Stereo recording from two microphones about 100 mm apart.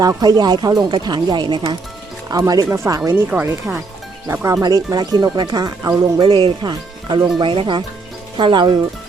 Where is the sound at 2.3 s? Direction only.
40° right (ahead or behind).